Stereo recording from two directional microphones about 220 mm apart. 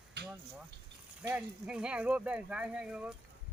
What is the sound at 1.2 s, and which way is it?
Speech, 5° right (ahead or behind).